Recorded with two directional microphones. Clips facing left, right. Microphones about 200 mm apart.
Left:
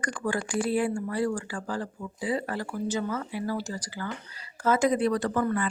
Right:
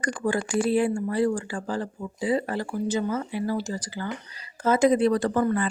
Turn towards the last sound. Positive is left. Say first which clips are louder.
# right 3 dB
turn(degrees=-30)  # may be behind; listen again after turning